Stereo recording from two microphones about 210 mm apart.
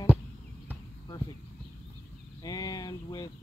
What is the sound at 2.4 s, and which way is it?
Speech, 15° left (ahead or behind).